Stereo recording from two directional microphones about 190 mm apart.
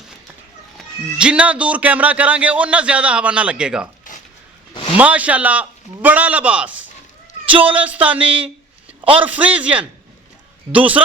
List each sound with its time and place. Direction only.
0.8 s speech: 5° right (ahead or behind)
4.1 s a sound: 45° left (ahead or behind)
4.9 s speech: 5° right (ahead or behind)